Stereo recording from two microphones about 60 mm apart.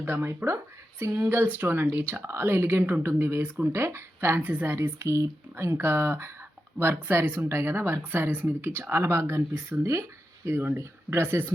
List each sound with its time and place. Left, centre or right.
0.0 s speech: right
1.2 s speech: right